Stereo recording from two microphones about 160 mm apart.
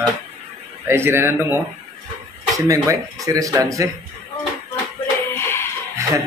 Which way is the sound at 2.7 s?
20° right (ahead or behind).